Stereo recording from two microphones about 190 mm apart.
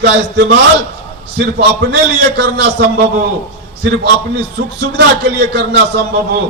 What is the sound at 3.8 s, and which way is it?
A man's voice, 60° right (ahead or behind).